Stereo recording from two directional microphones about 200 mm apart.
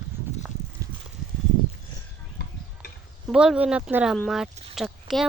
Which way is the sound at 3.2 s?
5° right (ahead or behind).